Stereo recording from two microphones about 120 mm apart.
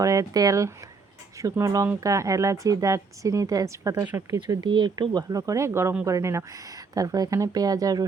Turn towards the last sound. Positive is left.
turn(degrees=-30)  # may be behind; listen again after turning